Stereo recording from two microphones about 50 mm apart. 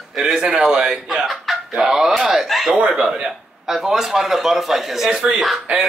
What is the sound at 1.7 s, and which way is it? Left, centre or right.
A man's voice, centre.